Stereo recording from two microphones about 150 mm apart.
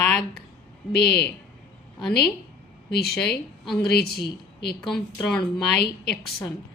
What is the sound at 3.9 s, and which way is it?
Speech, 90° left.